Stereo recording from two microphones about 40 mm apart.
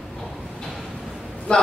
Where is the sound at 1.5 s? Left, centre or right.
Left.